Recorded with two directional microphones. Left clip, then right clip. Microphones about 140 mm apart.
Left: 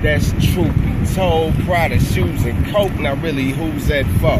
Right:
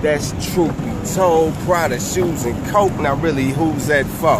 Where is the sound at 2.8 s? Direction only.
35° right (ahead or behind).